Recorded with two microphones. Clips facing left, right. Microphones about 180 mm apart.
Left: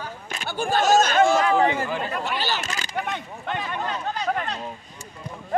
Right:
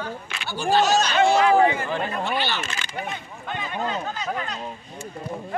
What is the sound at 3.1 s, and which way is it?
Speech, 65° left (ahead or behind).